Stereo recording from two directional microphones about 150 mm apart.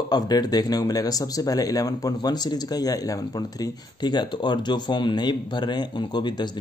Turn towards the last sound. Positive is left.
turn(degrees=30)  # may be behind; listen again after turning